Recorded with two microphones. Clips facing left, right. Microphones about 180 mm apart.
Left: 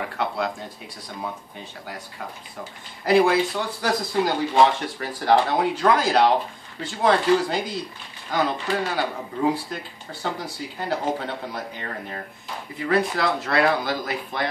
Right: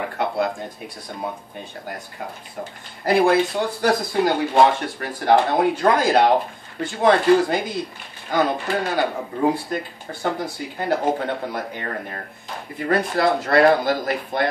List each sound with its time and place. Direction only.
3.1 s speech: 50° right (ahead or behind)